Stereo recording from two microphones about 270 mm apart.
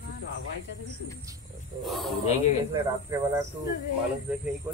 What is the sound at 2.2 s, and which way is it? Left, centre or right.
Speech, left.